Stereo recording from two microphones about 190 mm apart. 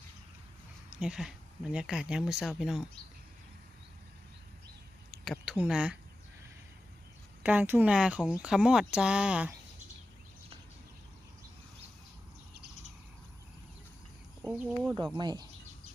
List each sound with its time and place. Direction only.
0.9 s speech: 5° right (ahead or behind)
5.2 s a sound: centre (ahead or behind)
7.4 s speech: 10° right (ahead or behind)
14.4 s speech: 10° right (ahead or behind)
15.1 s speech: 20° right (ahead or behind)